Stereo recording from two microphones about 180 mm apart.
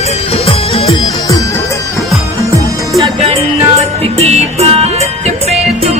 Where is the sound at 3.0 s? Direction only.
35° right (ahead or behind).